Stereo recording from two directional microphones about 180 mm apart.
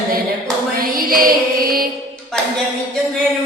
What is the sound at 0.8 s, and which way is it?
Music, 55° right (ahead or behind).